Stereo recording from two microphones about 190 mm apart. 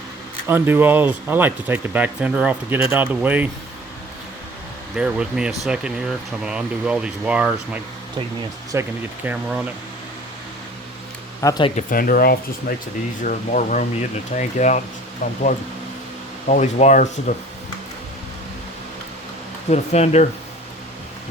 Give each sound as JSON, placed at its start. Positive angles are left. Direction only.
{"t": 0.4, "sound": "speech", "side_deg": -10}
{"t": 4.9, "sound": "speech", "side_deg": -5}
{"t": 11.4, "sound": "speech", "side_deg": 20}
{"t": 11.9, "sound": "speech", "side_deg": 50}
{"t": 16.5, "sound": "speech", "side_deg": 40}
{"t": 19.7, "sound": "speech", "side_deg": 35}